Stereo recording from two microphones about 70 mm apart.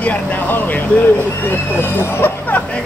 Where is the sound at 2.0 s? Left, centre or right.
Left.